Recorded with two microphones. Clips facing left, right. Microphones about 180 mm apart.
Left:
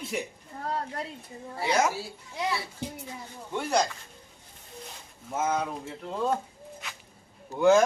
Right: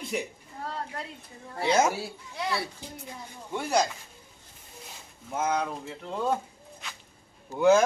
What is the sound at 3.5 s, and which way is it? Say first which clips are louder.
Speech: even; 10° right (ahead or behind).